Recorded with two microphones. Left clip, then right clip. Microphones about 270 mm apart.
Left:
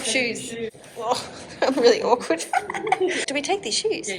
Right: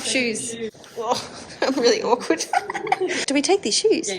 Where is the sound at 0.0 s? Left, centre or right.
Centre.